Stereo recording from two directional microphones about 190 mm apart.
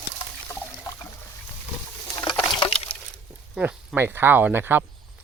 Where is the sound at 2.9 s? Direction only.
30° left (ahead or behind).